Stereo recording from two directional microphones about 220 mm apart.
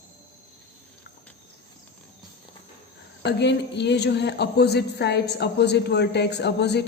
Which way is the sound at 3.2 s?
50° left (ahead or behind).